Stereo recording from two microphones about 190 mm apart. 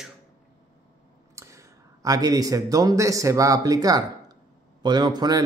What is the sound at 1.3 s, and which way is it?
A man's voice, 15° right (ahead or behind).